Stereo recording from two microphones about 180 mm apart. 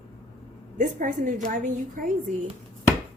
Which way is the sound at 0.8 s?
45° right (ahead or behind).